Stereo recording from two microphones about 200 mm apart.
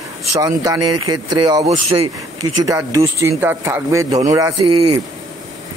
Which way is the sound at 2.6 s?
15° right (ahead or behind).